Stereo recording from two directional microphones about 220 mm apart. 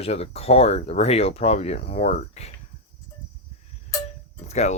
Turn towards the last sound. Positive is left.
turn(degrees=30)  # may be behind; listen again after turning